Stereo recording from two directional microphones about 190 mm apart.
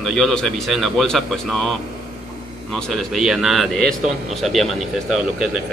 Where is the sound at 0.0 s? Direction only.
Centre (ahead or behind).